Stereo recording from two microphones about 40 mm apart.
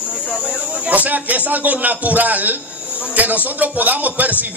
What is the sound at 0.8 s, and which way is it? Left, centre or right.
A man's voice, right.